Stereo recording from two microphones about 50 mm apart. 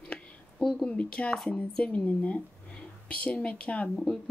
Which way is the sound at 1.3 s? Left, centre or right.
Centre.